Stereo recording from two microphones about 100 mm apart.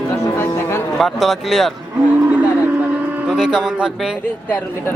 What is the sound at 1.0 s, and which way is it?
Speech, centre (ahead or behind).